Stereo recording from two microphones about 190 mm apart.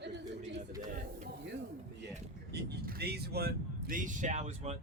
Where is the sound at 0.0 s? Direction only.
65° right (ahead or behind).